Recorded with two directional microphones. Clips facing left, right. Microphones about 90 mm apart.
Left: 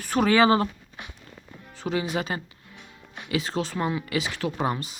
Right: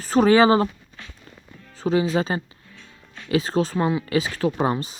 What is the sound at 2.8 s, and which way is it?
Music, 20° left (ahead or behind).